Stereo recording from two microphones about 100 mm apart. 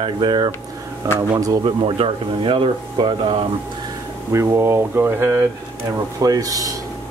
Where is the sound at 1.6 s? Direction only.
60° right (ahead or behind).